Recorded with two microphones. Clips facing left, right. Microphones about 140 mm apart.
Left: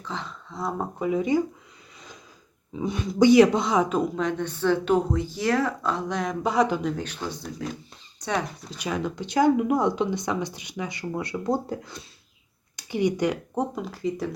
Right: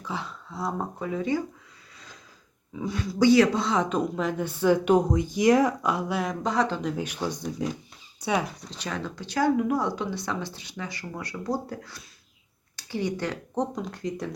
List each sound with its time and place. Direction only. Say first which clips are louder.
0.0 s a sound: right 1 dB; 10° right (ahead or behind)
0.9 s speech: left 6 dB; 15° left (ahead or behind)
2.7 s speech: left 4 dB; 20° left (ahead or behind); by 6.3 s 5° right (ahead or behind)
6.4 s speech: left 5 dB; 10° left (ahead or behind)
6.8 s speech: even; 10° right (ahead or behind)
8.7 s speech: left 7 dB; 10° left (ahead or behind)